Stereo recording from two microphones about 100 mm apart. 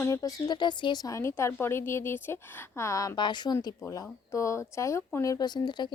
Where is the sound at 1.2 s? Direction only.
30° left (ahead or behind).